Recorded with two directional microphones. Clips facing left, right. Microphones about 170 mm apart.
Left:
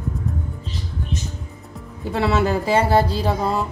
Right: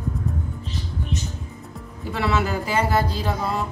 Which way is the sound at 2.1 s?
35° left (ahead or behind).